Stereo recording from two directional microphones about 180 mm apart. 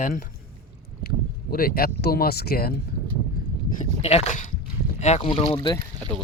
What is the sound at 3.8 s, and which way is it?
Speech, 35° left (ahead or behind).